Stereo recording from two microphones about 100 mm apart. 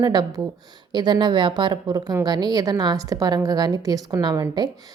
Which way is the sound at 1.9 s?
40° right (ahead or behind).